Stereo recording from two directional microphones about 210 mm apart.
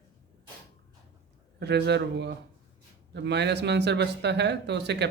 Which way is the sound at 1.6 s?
55° right (ahead or behind).